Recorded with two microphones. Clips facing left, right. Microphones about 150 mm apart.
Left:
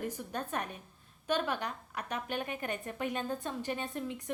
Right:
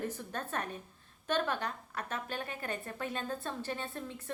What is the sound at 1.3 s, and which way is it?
A woman's voice, 10° left (ahead or behind).